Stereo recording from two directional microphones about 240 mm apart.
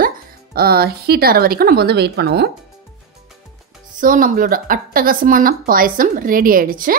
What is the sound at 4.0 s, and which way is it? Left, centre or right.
Speech, right.